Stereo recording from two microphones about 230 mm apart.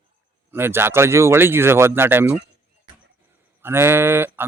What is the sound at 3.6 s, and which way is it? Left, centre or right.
Livestock, centre.